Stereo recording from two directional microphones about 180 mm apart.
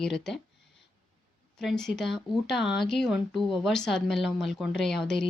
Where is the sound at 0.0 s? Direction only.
5° left (ahead or behind).